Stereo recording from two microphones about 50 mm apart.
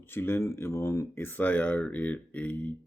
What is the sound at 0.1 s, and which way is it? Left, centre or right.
Speech, left.